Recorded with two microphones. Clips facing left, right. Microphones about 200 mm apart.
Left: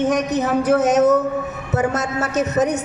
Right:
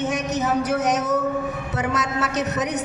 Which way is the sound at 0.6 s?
50° left (ahead or behind).